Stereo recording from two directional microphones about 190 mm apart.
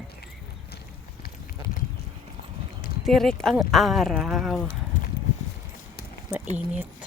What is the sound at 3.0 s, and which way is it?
Speech, centre (ahead or behind).